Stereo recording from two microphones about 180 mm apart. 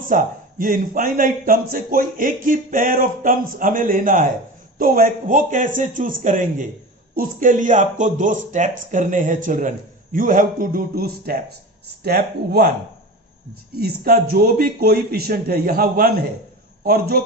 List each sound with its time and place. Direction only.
0.1 s a man's voice: 45° right (ahead or behind)
13.7 s a man's voice: 55° right (ahead or behind)